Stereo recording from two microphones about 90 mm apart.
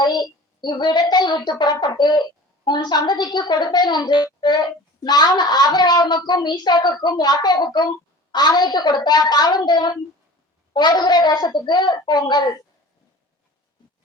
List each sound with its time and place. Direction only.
0.0 s a woman's voice: 55° left (ahead or behind)